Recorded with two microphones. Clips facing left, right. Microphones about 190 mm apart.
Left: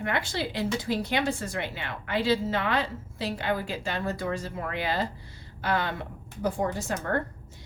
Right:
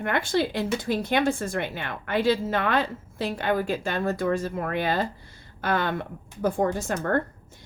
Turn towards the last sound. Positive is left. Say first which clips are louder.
# right 4 dB
turn(degrees=-50)  # may be behind; listen again after turning